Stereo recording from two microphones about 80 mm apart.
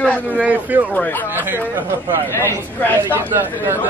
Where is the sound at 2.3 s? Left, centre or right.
Left.